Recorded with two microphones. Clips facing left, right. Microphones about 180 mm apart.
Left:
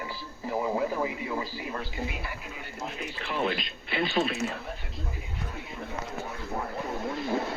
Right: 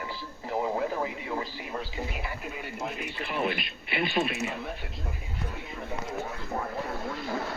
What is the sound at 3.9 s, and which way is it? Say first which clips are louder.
Speech: left 1 dB; 10° right (ahead or behind).